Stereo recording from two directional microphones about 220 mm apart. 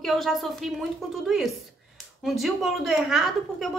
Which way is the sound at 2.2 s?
Centre (ahead or behind).